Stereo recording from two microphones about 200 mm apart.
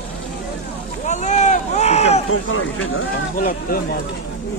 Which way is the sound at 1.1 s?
35° left (ahead or behind).